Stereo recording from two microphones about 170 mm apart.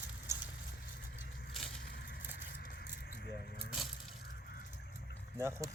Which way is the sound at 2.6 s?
80° left.